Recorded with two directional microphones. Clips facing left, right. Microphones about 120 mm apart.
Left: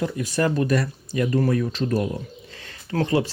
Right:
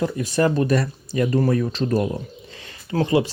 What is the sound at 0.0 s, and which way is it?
Speech, 30° right (ahead or behind).